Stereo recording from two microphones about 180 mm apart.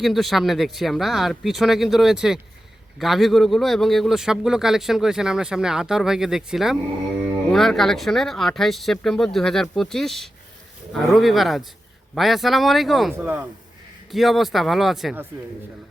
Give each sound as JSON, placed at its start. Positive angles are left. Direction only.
{"t": 0.0, "sound": "speech", "side_deg": 0}